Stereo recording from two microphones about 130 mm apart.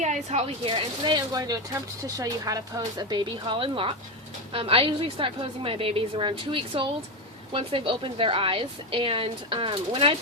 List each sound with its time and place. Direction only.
0.0 s speech: 60° right (ahead or behind); by 10.2 s 45° right (ahead or behind)